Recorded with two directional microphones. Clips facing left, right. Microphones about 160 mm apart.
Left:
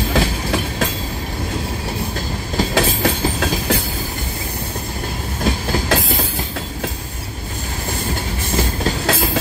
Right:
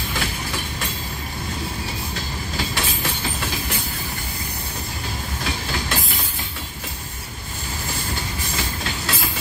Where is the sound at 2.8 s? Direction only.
90° left.